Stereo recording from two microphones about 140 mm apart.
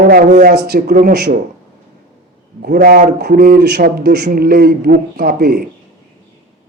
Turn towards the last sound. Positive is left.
turn(degrees=-90)